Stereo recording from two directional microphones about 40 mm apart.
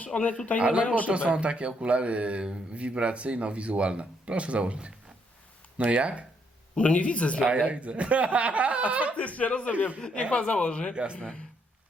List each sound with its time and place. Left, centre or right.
0.0 s speech: left
0.6 s a man's voice: right
6.7 s speech: left
7.4 s speech: right
9.1 s speech: left
10.9 s a man's voice: right
11.2 s speech: centre